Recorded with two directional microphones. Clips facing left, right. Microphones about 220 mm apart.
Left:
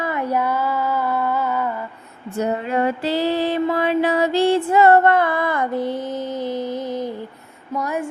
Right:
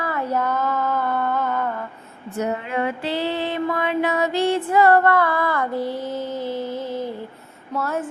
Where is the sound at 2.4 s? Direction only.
35° left (ahead or behind); by 7.1 s 15° left (ahead or behind).